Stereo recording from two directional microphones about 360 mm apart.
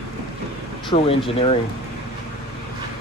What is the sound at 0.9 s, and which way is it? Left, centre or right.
Speech, centre.